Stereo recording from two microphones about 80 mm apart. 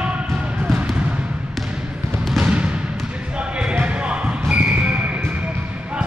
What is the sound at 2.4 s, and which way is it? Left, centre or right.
Basketball bounce, centre.